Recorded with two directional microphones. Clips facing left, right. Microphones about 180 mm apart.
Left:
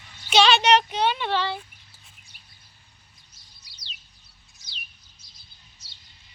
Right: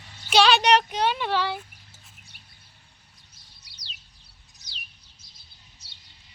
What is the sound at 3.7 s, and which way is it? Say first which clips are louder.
Bird: right 1 dB; 60° right (ahead or behind).